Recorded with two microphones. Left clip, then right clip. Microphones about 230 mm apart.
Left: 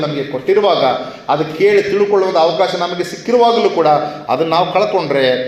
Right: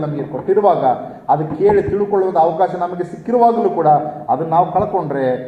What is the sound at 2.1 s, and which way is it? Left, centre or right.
A man's voice, left.